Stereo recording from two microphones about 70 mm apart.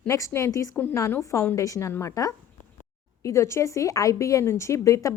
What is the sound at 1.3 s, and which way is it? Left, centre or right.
Speech, left.